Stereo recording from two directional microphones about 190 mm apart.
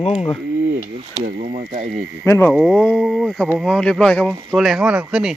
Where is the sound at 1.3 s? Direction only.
35° right (ahead or behind).